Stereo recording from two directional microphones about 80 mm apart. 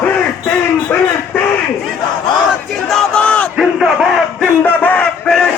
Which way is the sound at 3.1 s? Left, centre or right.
Centre.